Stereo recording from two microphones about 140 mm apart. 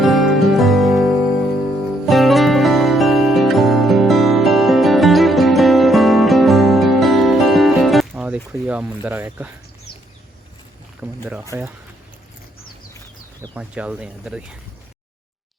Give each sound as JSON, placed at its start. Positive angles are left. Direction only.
{"t": 0.0, "sound": "music", "side_deg": 0}
{"t": 8.1, "sound": "a sound", "side_deg": -10}
{"t": 11.0, "sound": "boat", "side_deg": -5}
{"t": 11.5, "sound": "speech", "side_deg": -20}
{"t": 13.5, "sound": "speech", "side_deg": -10}